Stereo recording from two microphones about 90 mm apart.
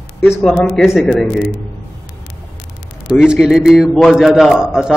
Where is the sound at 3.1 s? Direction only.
10° right (ahead or behind).